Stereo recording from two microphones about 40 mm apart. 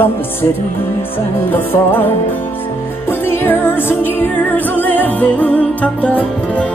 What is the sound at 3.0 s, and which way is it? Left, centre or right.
Music, left.